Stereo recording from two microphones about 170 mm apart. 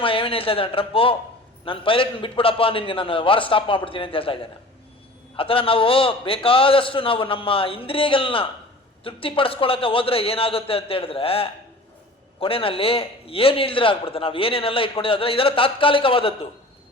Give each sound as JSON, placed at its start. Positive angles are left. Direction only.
{"t": 0.0, "sound": "a man's voice", "side_deg": 30}
{"t": 5.4, "sound": "a man's voice", "side_deg": 30}